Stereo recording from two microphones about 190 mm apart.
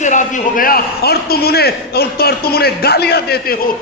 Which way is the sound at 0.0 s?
40° left (ahead or behind).